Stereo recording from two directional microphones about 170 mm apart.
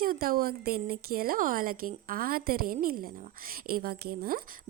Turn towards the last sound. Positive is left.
turn(degrees=-65)  # may be behind; listen again after turning